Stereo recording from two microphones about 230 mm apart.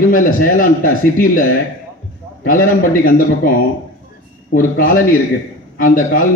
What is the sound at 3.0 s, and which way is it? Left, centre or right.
Speech, left.